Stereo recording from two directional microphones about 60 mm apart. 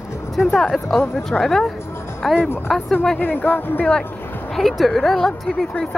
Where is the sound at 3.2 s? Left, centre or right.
Left.